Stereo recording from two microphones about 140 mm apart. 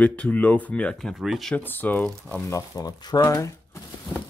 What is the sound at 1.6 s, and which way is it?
Speech, 15° left (ahead or behind).